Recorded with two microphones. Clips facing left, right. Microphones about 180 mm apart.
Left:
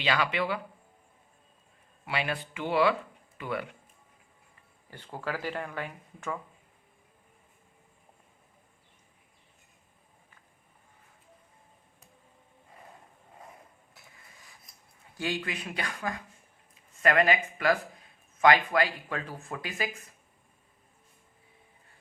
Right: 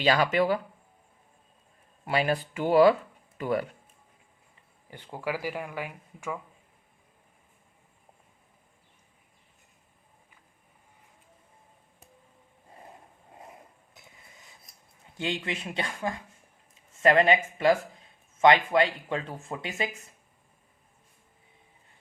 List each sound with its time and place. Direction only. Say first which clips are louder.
0.0 s speech: right 5 dB; 40° right (ahead or behind)
2.0 s speech: right 6 dB; 40° right (ahead or behind)
4.9 s speech: right 3 dB; 15° right (ahead or behind)
13.9 s a sound: right 2 dB; 20° right (ahead or behind)
15.1 s speech: right 1 dB; 25° right (ahead or behind)